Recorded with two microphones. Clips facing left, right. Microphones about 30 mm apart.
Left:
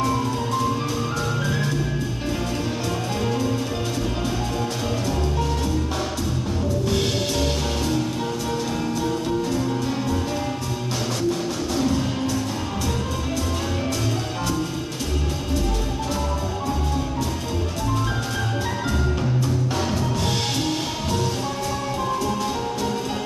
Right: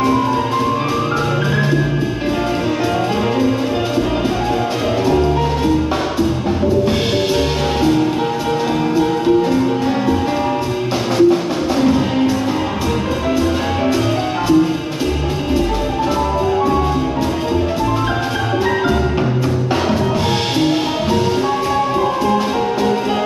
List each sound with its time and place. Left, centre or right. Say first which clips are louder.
7.8 s music: right 12 dB; right
9.5 s music: right 8 dB; right
11.1 s music: right 14 dB; right